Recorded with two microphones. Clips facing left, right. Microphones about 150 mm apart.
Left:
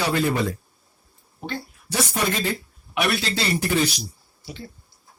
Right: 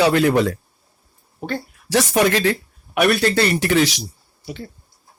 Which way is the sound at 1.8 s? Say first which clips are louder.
Right 8 dB; 85° right.